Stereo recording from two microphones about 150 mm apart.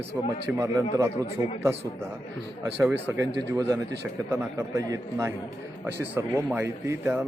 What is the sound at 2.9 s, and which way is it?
A man's voice, 20° right (ahead or behind).